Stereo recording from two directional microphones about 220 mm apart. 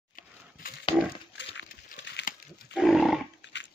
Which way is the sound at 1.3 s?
55° left (ahead or behind).